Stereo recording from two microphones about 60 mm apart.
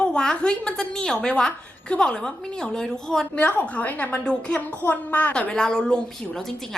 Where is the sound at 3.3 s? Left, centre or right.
Left.